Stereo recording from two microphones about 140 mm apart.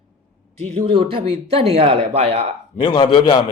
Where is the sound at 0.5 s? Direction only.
50° right (ahead or behind).